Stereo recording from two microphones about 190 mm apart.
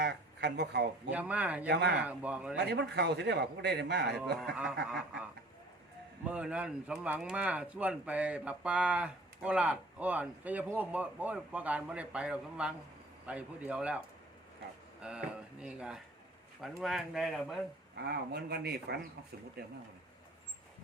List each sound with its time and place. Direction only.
0.0 s speech: 60° right (ahead or behind)
1.1 s speech: 5° right (ahead or behind)
1.6 s a man's voice: 65° right (ahead or behind)
2.0 s speech: 10° right (ahead or behind)
2.6 s a man's voice: 65° right (ahead or behind)
4.4 s speech: 5° right (ahead or behind)
6.2 s speech: 5° right (ahead or behind)
15.0 s speech: 5° right (ahead or behind)
18.1 s a man's voice: 55° right (ahead or behind)